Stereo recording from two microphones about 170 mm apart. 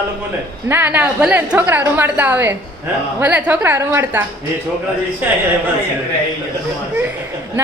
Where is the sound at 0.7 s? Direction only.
10° right (ahead or behind).